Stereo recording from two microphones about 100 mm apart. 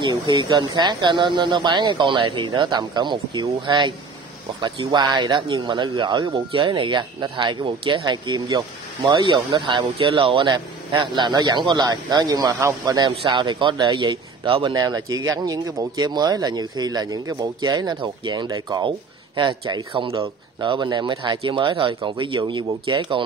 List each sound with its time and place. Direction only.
0.0 s speech: 50° right (ahead or behind)
13.3 s speech: 50° right (ahead or behind)
14.7 s speech: 40° right (ahead or behind)